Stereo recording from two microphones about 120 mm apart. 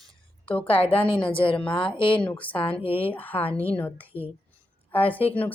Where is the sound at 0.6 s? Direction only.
50° left (ahead or behind).